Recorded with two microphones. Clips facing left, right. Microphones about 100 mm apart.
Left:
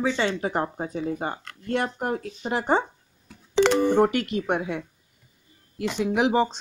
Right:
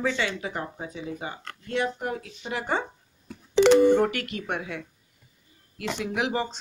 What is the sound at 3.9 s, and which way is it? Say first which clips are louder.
Speech: left 3 dB; 25° left (ahead or behind).